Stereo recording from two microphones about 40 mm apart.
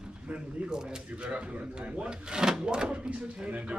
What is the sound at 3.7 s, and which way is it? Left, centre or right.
Speech, right.